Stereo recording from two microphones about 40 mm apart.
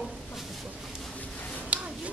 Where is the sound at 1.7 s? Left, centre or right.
Right.